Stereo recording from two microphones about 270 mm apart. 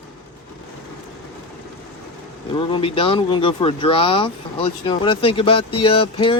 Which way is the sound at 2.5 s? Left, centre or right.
Centre.